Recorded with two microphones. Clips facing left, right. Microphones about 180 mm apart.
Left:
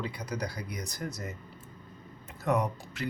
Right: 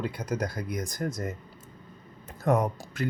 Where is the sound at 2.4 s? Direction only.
50° right (ahead or behind).